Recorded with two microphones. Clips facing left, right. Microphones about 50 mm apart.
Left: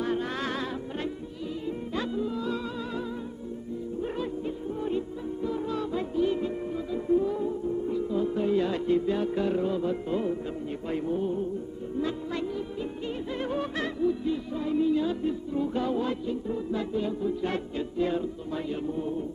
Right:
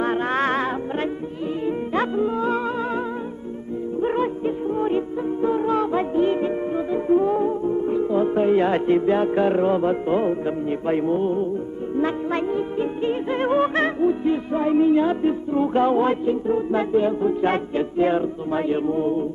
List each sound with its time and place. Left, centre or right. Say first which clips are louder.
0.0 s music: right 8 dB; right
4.0 s music: right 11 dB; right